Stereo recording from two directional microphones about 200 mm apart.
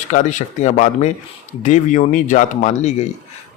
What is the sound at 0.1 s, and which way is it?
A man's voice, 35° left (ahead or behind).